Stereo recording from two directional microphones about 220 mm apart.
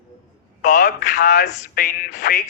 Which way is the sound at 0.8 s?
50° left (ahead or behind).